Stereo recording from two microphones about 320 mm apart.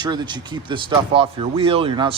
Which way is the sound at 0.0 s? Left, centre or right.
Centre.